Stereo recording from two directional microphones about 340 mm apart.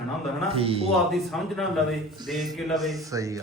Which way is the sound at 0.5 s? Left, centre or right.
Centre.